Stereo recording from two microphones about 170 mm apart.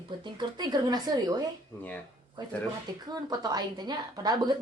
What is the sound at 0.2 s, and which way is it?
Speech, 25° right (ahead or behind).